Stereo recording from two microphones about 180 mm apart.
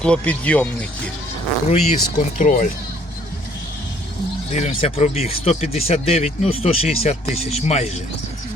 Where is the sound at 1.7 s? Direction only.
40° left (ahead or behind).